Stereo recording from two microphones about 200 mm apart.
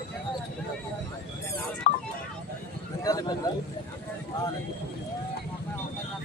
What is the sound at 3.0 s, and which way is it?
Speech, 20° left (ahead or behind).